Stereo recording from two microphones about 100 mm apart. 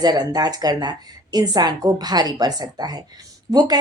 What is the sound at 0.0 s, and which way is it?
A woman's voice, 40° right (ahead or behind).